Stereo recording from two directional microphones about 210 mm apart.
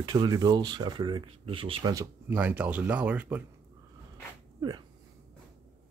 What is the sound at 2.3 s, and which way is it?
Speech, 10° right (ahead or behind).